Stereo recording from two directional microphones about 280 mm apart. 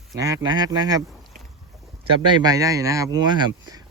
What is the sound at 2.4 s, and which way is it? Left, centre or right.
Speech, centre.